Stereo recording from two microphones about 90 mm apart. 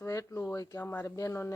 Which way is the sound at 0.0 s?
35° left (ahead or behind).